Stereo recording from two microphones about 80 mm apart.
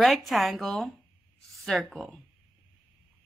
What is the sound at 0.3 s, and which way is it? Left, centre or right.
Speech, centre.